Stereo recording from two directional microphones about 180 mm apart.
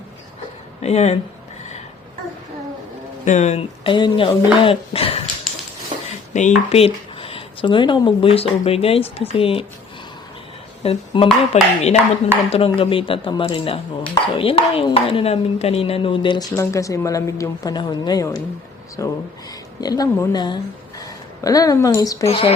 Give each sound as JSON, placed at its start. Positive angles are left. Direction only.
{"t": 0.8, "sound": "speech", "side_deg": 35}
{"t": 3.2, "sound": "speech", "side_deg": 40}
{"t": 6.3, "sound": "speech", "side_deg": 40}
{"t": 10.8, "sound": "speech", "side_deg": 30}
{"t": 22.3, "sound": "speech", "side_deg": 30}